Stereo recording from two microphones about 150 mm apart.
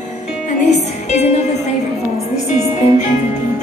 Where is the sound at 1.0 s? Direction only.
50° left (ahead or behind).